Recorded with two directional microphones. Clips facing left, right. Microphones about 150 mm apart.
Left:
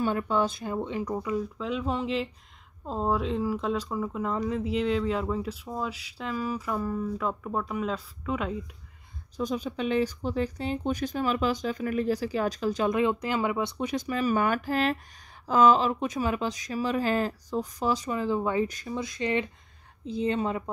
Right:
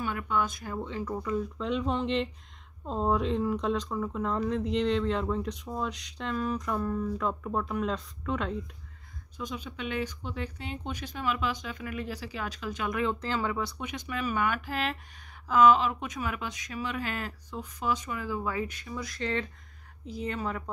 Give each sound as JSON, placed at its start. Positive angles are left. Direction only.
{"t": 0.0, "sound": "speech", "side_deg": 30}
{"t": 9.4, "sound": "speech", "side_deg": 40}
{"t": 12.9, "sound": "speech", "side_deg": 15}
{"t": 13.7, "sound": "speech", "side_deg": 40}
{"t": 18.7, "sound": "speech", "side_deg": 40}
{"t": 18.9, "sound": "speech", "side_deg": 20}